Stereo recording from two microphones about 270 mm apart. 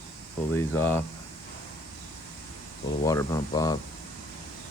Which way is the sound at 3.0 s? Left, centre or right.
Centre.